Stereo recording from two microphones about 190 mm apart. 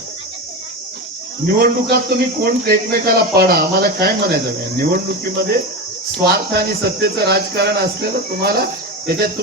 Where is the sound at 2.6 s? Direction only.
50° right (ahead or behind).